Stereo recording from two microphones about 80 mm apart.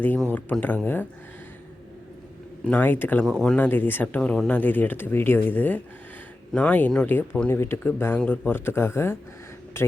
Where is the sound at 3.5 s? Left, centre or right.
Left.